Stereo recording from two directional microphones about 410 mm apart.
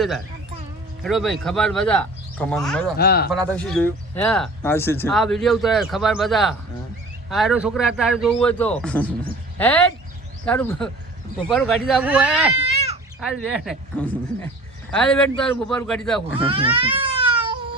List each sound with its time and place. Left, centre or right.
1.0 s speech: centre
3.0 s speech: left
3.3 s speech: centre
16.2 s a sound: centre